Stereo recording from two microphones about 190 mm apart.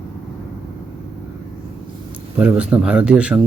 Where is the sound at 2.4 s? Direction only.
5° right (ahead or behind).